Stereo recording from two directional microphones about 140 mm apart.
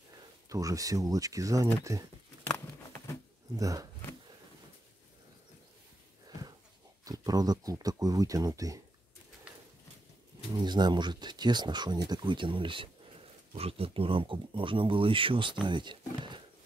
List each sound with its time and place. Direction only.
0.5 s speech: 25° right (ahead or behind)
3.5 s speech: 25° right (ahead or behind)
7.1 s speech: 25° right (ahead or behind)
10.5 s speech: 30° right (ahead or behind)